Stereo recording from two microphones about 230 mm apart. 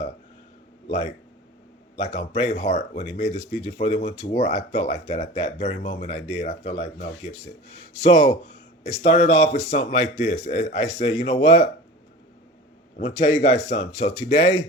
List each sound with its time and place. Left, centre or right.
0.9 s speech: left
13.0 s speech: left